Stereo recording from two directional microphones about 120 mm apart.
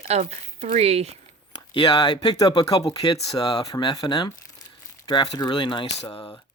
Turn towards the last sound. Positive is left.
turn(degrees=20)  # may be behind; listen again after turning